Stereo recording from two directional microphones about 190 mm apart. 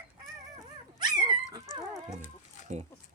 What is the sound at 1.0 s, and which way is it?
Dog, 20° right (ahead or behind).